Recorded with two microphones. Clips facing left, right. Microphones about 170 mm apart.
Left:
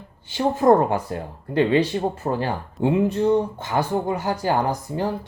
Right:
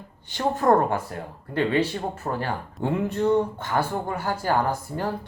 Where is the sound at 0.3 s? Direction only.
10° left (ahead or behind).